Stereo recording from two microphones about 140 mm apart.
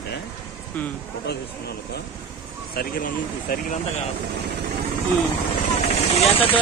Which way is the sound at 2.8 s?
85° left.